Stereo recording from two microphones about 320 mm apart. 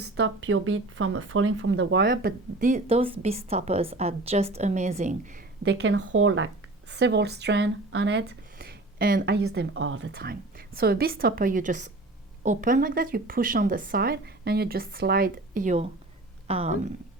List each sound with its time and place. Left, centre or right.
0.0 s speech: right
5.6 s speech: right